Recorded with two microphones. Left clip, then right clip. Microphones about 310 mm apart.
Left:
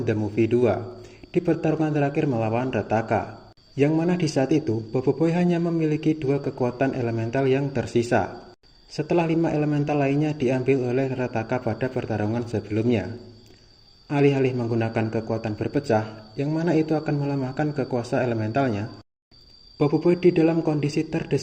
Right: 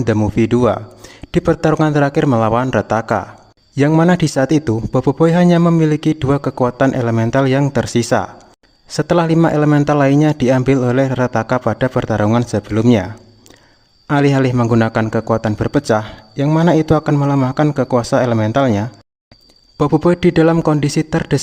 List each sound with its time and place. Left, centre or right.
0.0 s a man's voice: right
14.1 s a man's voice: right